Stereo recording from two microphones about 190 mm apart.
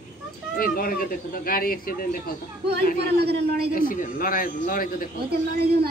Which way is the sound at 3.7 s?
45° left (ahead or behind).